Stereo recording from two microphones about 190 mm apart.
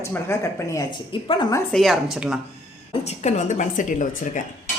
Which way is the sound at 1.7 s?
Centre (ahead or behind).